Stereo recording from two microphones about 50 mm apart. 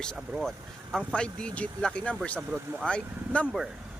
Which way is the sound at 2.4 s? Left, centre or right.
Centre.